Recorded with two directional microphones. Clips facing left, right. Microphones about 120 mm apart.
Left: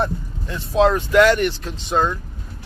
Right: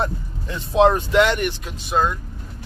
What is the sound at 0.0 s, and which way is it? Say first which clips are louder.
Speech: left 2 dB; 20° right (ahead or behind).